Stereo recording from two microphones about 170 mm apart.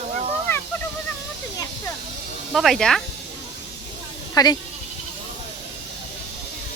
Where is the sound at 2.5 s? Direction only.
Centre (ahead or behind).